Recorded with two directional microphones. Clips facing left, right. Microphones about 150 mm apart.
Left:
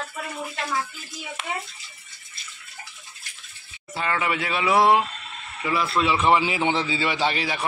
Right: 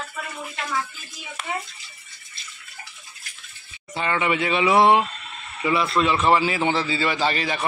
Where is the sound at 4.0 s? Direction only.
Centre (ahead or behind).